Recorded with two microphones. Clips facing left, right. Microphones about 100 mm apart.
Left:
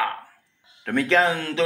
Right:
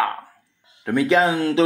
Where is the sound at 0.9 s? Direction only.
15° right (ahead or behind).